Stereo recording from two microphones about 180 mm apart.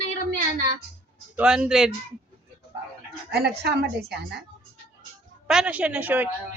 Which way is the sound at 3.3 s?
65° right (ahead or behind).